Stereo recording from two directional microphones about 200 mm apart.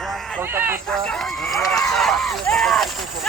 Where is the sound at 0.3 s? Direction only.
10° right (ahead or behind).